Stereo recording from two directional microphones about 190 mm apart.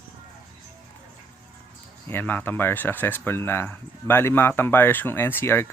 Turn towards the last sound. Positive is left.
turn(degrees=10)  # may be behind; listen again after turning